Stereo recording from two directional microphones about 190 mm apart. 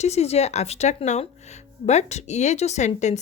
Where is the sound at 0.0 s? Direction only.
35° left (ahead or behind).